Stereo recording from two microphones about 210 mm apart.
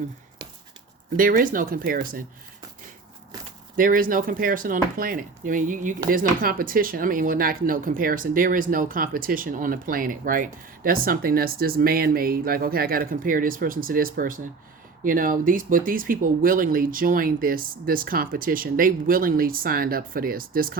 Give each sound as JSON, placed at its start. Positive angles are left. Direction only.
{"t": 1.1, "sound": "speech", "side_deg": -40}
{"t": 3.8, "sound": "speech", "side_deg": -40}